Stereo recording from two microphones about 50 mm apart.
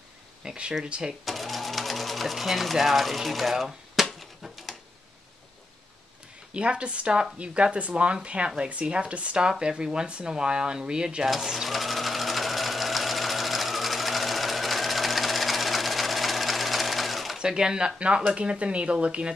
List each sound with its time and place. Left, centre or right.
0.5 s speech: centre
1.2 s sewing machine: centre
6.5 s speech: right
11.2 s sewing machine: centre
17.4 s speech: centre